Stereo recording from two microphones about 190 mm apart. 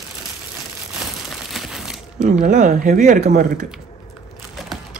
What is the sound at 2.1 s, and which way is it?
Speech, 40° right (ahead or behind).